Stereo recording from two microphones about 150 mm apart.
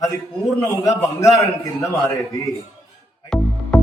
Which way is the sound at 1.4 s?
20° left (ahead or behind).